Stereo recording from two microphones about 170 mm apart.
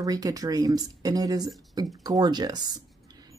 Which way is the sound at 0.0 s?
20° right (ahead or behind).